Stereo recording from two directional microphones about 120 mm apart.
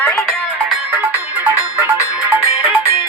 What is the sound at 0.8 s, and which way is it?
Music, 15° right (ahead or behind).